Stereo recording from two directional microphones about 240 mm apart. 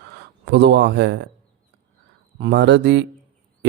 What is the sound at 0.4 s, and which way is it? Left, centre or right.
Speech, right.